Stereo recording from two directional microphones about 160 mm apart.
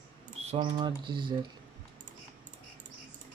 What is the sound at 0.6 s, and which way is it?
Speech, 30° right (ahead or behind).